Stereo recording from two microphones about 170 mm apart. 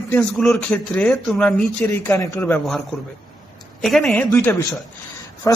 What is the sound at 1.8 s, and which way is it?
Speech, 15° left (ahead or behind).